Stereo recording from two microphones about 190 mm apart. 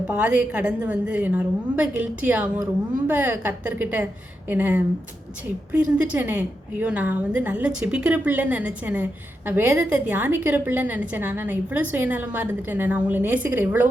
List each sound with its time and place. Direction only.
0.1 s a woman's voice: 10° right (ahead or behind)